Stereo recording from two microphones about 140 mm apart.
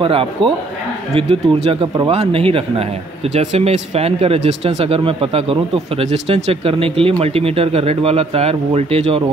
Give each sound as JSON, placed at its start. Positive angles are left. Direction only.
{"t": 0.0, "sound": "speech", "side_deg": -40}